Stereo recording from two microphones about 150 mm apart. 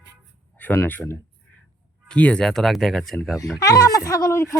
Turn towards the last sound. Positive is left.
turn(degrees=20)  # may be behind; listen again after turning